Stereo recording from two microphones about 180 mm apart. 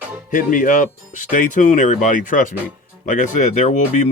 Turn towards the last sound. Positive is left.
turn(degrees=40)  # may be behind; listen again after turning